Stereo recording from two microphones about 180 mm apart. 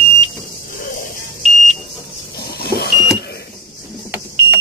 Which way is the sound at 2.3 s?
60° left (ahead or behind).